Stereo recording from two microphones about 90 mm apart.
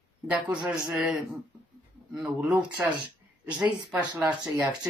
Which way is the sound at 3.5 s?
55° right (ahead or behind).